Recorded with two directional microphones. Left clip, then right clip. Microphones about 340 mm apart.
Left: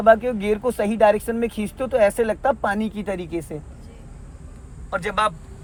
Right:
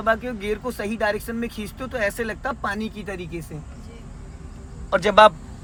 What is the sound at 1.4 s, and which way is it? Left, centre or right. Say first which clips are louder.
Speech: left 6 dB; left.